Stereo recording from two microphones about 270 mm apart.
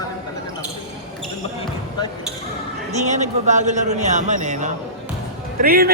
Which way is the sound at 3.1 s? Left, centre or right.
Right.